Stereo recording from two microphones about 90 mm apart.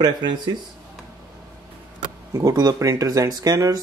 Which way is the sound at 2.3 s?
40° right (ahead or behind).